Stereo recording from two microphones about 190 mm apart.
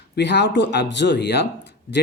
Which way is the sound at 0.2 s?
65° left (ahead or behind).